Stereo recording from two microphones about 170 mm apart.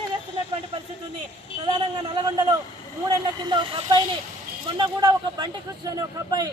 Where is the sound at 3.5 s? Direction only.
30° right (ahead or behind).